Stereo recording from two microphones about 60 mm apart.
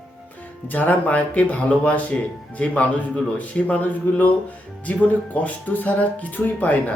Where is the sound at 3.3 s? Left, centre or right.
Left.